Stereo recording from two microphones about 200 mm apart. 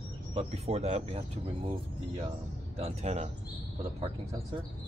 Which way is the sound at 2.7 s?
30° right (ahead or behind).